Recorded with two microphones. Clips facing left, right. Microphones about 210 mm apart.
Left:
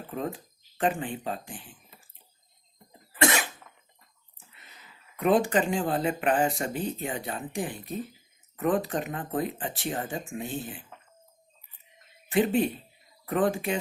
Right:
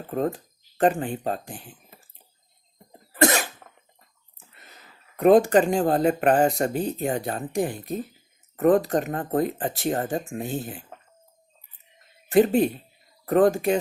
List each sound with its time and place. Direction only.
0.1 s speech: 45° right (ahead or behind)
2.9 s cough: 40° right (ahead or behind)
4.5 s speech: 45° right (ahead or behind)
12.3 s speech: 40° right (ahead or behind)